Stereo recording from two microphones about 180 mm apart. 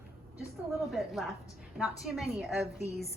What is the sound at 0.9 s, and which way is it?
A woman's voice, centre (ahead or behind).